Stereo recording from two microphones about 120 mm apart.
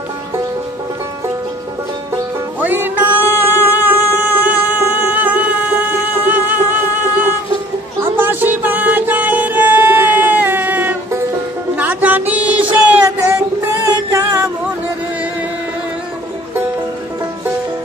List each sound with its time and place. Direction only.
2.6 s music: 15° right (ahead or behind)
11.7 s a sound: 15° right (ahead or behind)
13.0 s child singing: 20° right (ahead or behind)
14.1 s music: 25° right (ahead or behind)